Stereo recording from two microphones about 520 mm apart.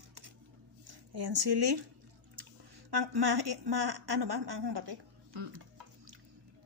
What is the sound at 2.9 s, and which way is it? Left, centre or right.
A woman's voice, right.